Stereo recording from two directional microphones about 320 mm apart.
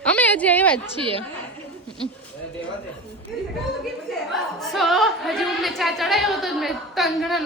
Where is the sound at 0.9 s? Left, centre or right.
Centre.